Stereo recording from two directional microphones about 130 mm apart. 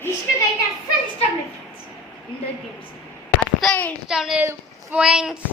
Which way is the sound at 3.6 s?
10° left (ahead or behind).